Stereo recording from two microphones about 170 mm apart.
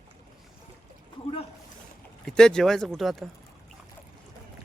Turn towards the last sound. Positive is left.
turn(degrees=0)  # may be behind; listen again after turning